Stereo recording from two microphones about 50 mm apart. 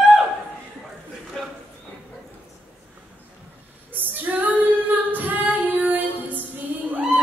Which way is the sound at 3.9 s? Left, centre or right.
Right.